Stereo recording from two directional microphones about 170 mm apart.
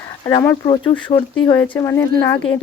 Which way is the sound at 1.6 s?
15° left (ahead or behind).